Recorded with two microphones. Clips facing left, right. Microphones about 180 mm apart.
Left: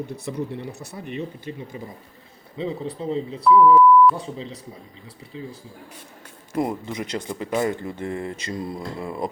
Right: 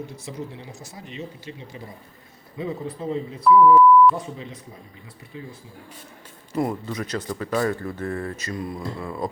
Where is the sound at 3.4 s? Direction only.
Centre (ahead or behind).